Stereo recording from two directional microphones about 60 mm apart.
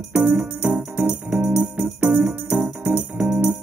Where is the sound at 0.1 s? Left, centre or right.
Right.